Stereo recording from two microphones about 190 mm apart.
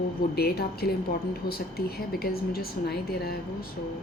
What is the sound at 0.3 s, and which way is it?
A woman's voice, 55° left (ahead or behind).